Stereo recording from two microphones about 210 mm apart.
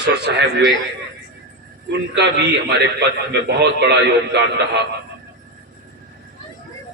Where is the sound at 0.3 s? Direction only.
55° right (ahead or behind).